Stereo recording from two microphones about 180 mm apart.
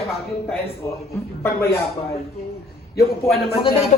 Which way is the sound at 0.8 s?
15° left (ahead or behind).